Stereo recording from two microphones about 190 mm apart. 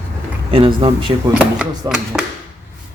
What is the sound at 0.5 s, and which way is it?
Speech, 30° right (ahead or behind).